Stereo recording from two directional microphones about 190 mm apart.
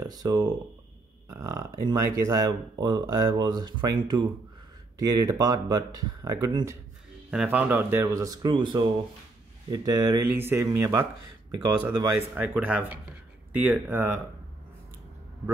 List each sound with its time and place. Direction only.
0.0 s a sound: 20° right (ahead or behind)
1.3 s speech: 15° right (ahead or behind)
4.9 s speech: 20° right (ahead or behind)
7.2 s speech: 5° right (ahead or behind)
12.4 s speech: 10° right (ahead or behind)